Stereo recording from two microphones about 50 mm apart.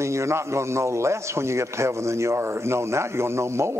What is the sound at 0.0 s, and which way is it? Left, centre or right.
Speech, right.